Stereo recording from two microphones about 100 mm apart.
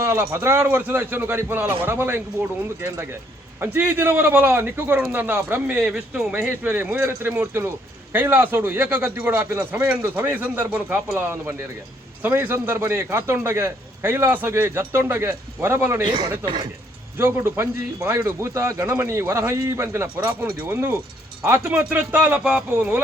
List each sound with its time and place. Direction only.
0.0 s a man's voice: 30° right (ahead or behind); by 6.5 s 5° right (ahead or behind)
6.5 s a man's voice: 15° right (ahead or behind)
16.0 s speech: 50° right (ahead or behind)
17.2 s a man's voice: 25° right (ahead or behind)